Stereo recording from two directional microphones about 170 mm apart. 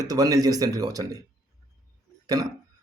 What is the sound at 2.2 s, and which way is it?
Speech, 20° right (ahead or behind).